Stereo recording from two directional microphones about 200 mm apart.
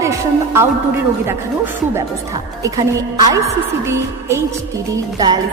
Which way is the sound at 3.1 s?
15° right (ahead or behind).